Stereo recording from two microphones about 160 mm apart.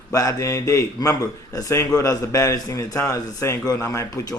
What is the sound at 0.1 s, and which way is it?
A man's voice, 20° left (ahead or behind).